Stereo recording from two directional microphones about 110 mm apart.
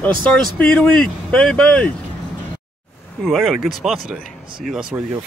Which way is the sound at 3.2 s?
Centre (ahead or behind).